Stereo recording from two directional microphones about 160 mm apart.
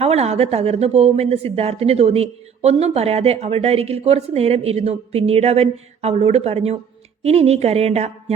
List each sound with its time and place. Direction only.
0.0 s speech: 40° right (ahead or behind)